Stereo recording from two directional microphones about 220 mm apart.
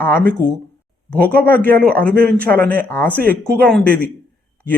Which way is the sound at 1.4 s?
10° left (ahead or behind).